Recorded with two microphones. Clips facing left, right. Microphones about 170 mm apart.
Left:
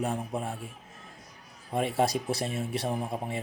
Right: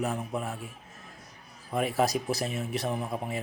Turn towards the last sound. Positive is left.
turn(degrees=30)  # may be behind; listen again after turning